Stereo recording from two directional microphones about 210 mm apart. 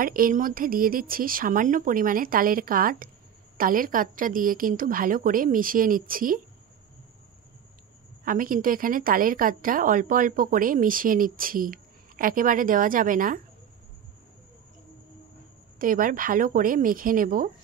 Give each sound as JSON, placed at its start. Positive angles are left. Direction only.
{"t": 0.0, "sound": "a woman's voice", "side_deg": -40}
{"t": 8.2, "sound": "a woman's voice", "side_deg": -40}
{"t": 15.8, "sound": "a woman's voice", "side_deg": -40}